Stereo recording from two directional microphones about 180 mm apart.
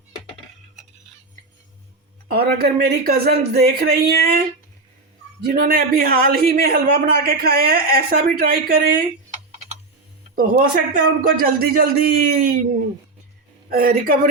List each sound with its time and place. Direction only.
2.3 s a man's voice: 60° right (ahead or behind)
5.5 s a man's voice: 55° right (ahead or behind)
10.3 s speech: 50° right (ahead or behind)
13.7 s a man's voice: 55° right (ahead or behind)